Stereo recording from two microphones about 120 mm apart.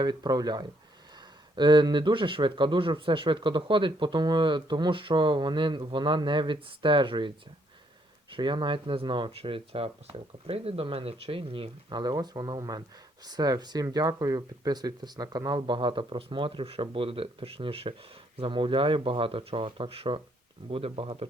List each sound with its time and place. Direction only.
0.0 s speech: 35° right (ahead or behind)